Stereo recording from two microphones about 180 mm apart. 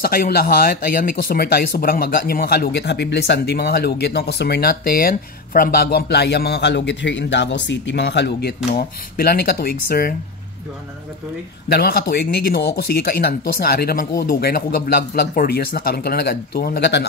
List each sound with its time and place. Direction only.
0.0 s speech: 55° left (ahead or behind)
11.7 s speech: 60° left (ahead or behind)